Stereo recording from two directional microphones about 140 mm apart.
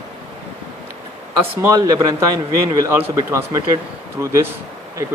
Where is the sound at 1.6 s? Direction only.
20° right (ahead or behind).